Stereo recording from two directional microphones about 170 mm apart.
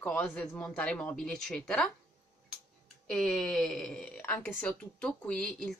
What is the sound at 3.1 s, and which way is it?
A woman's voice, 5° left (ahead or behind).